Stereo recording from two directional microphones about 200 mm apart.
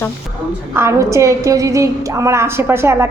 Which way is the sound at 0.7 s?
15° right (ahead or behind).